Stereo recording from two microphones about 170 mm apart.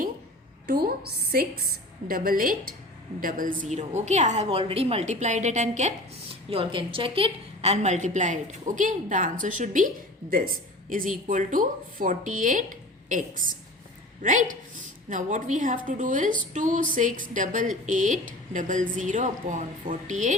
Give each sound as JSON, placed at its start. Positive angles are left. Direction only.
{"t": 0.7, "sound": "a woman's voice", "side_deg": -65}
{"t": 6.5, "sound": "a woman's voice", "side_deg": -30}